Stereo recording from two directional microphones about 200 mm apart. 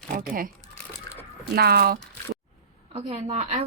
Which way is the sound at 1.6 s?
50° right (ahead or behind).